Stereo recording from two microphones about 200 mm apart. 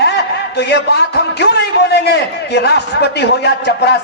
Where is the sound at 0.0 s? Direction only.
55° left (ahead or behind).